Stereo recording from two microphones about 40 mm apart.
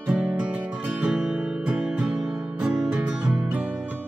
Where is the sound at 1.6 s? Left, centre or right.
Right.